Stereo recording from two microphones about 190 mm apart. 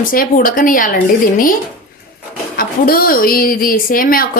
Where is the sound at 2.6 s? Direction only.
50° left (ahead or behind).